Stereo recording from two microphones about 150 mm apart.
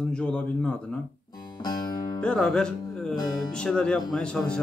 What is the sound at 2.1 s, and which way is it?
Speech, 5° left (ahead or behind).